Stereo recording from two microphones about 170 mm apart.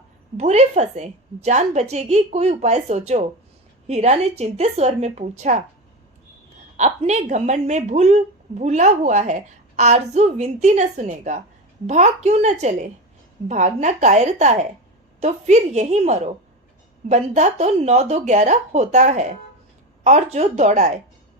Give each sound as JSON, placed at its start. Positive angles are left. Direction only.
{"t": 0.3, "sound": "a woman's voice", "side_deg": -40}
{"t": 6.7, "sound": "a woman's voice", "side_deg": -45}